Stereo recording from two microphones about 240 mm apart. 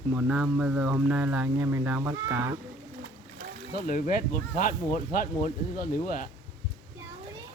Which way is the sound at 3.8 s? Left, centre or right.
Left.